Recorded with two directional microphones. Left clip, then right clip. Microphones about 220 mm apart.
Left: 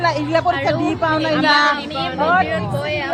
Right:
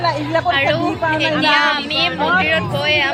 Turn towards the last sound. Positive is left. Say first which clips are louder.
# right 6 dB
turn(degrees=10)  # may be behind; listen again after turning